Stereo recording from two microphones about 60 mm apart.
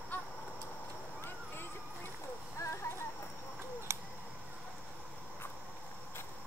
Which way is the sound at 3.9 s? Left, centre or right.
Right.